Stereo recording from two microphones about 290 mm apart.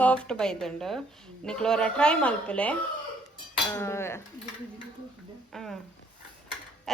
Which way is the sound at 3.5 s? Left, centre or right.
Centre.